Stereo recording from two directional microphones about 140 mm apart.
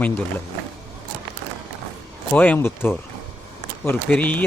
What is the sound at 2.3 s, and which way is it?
A man's voice, 10° left (ahead or behind).